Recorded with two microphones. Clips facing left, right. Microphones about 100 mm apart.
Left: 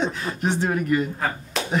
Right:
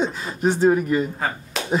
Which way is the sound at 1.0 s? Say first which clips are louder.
Right 1 dB; 5° right (ahead or behind).